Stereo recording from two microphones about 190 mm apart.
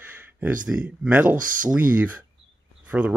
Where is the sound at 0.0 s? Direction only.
10° right (ahead or behind).